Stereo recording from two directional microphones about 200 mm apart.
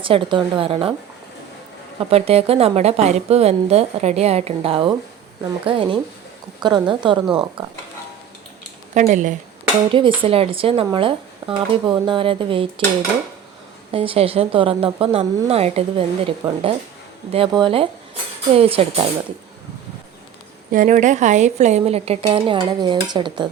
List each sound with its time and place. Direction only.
0.0 s speech: 25° right (ahead or behind)
2.0 s a woman's voice: 30° right (ahead or behind)
9.0 s a woman's voice: 40° right (ahead or behind)
9.9 s speech: 25° right (ahead or behind)
13.9 s speech: 30° right (ahead or behind)
20.7 s a woman's voice: 40° right (ahead or behind); by 23.5 s 25° right (ahead or behind)